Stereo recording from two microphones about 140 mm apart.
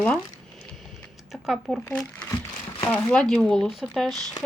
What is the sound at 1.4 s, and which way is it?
Speech, centre (ahead or behind).